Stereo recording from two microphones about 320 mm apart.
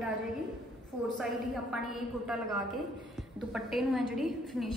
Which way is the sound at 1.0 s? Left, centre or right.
Centre.